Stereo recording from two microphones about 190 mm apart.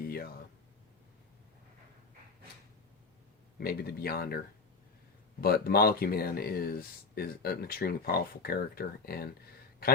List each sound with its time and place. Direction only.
3.6 s speech: 55° left (ahead or behind)
5.4 s speech: 55° left (ahead or behind)